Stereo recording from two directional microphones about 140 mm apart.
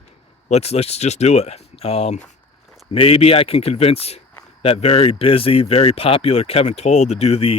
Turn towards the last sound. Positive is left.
turn(degrees=45)  # may be behind; listen again after turning